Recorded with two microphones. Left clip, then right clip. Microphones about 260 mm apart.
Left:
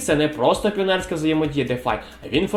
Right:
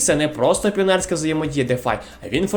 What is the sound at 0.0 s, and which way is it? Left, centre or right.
Speech, right.